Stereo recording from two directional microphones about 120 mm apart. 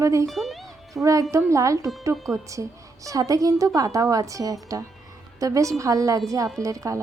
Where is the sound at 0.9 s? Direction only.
25° right (ahead or behind).